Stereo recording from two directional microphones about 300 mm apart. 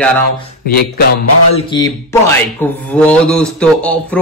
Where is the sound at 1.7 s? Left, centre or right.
Centre.